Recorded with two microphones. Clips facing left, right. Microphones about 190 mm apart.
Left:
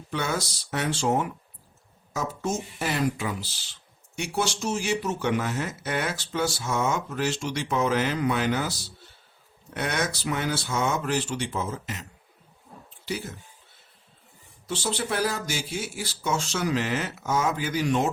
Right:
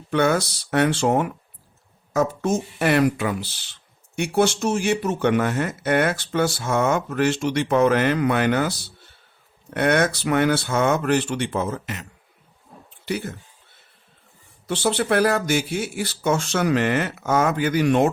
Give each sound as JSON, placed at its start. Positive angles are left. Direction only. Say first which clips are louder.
{"t": 0.1, "sound": "speech", "louder": "right 9 dB", "side_deg": -60}
{"t": 13.1, "sound": "speech", "louder": "right 5 dB", "side_deg": -60}
{"t": 14.7, "sound": "speech", "louder": "right 8 dB", "side_deg": -60}